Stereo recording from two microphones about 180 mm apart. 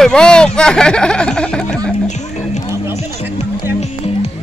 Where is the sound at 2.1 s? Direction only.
40° left (ahead or behind).